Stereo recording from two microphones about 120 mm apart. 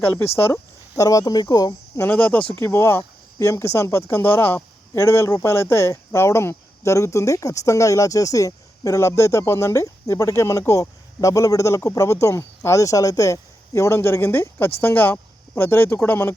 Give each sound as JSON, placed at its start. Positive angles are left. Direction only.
{"t": 0.3, "sound": "speech", "side_deg": 20}
{"t": 1.0, "sound": "speech", "side_deg": 30}
{"t": 2.0, "sound": "speech", "side_deg": 10}